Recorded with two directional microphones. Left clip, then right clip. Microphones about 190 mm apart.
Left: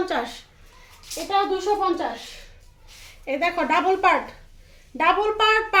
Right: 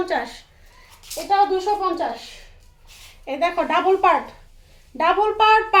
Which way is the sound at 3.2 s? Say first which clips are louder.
Right 2 dB; 20° left (ahead or behind).